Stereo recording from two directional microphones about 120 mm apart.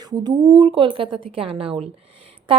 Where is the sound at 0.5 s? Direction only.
50° right (ahead or behind).